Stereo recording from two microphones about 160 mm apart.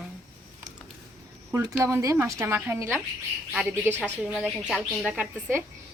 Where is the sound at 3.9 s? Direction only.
10° left (ahead or behind).